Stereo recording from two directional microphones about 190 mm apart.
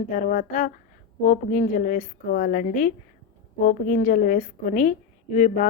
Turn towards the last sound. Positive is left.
turn(degrees=40)  # may be behind; listen again after turning